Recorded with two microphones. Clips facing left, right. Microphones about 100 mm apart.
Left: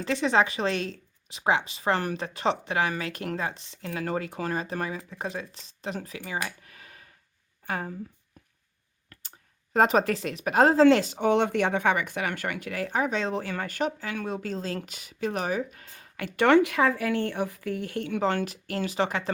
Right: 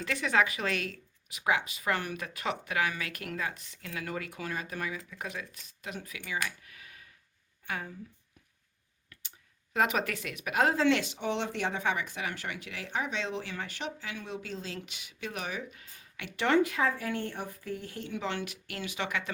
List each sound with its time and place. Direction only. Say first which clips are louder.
0.0 s a woman's voice: left 5 dB; 25° left (ahead or behind)
9.7 s speech: left 7 dB; 40° left (ahead or behind); by 16.6 s 55° left (ahead or behind)
16.6 s speech: left 5 dB; 80° left
18.2 s speech: left 9 dB; 45° left (ahead or behind)